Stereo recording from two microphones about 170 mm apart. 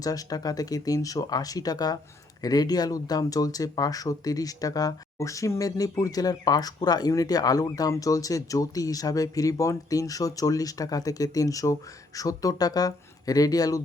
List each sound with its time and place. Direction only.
0.0 s speech: 20° left (ahead or behind)